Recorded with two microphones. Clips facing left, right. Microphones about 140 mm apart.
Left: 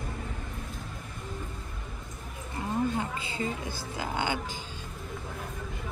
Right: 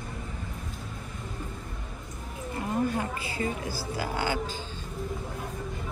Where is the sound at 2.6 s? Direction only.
25° left (ahead or behind).